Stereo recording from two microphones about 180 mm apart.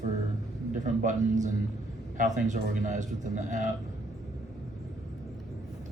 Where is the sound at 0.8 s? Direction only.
45° right (ahead or behind).